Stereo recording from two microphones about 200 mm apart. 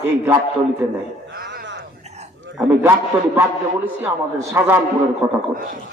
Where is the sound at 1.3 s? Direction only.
55° right (ahead or behind).